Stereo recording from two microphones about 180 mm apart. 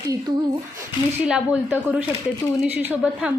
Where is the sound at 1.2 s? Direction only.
5° right (ahead or behind).